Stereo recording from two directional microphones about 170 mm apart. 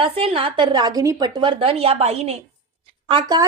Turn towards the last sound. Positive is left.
turn(degrees=-25)  # may be behind; listen again after turning